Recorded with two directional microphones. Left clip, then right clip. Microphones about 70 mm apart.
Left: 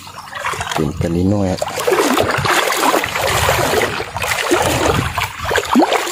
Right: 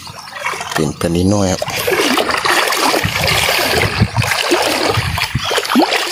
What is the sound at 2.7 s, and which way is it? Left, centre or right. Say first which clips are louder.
Boat: right 1 dB; centre.